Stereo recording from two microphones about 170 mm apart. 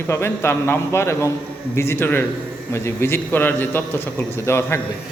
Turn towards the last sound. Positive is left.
turn(degrees=15)  # may be behind; listen again after turning